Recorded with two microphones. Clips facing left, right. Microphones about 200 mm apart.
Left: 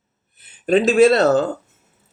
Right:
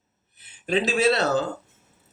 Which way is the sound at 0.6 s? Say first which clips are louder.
Left 9 dB; 50° left (ahead or behind).